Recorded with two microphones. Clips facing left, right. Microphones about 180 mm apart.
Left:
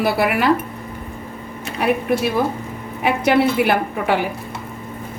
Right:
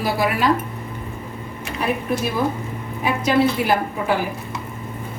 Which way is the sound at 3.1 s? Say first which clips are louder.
Left 2 dB; 65° left (ahead or behind).